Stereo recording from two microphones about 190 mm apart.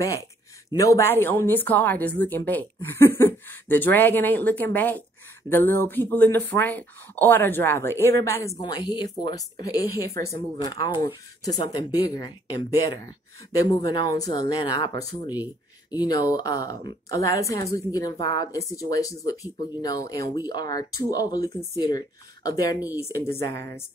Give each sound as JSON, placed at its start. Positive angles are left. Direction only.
{"t": 0.7, "sound": "a woman's voice", "side_deg": 15}
{"t": 13.7, "sound": "a woman's voice", "side_deg": 20}
{"t": 15.3, "sound": "a sound", "side_deg": -10}
{"t": 16.0, "sound": "a woman's voice", "side_deg": 20}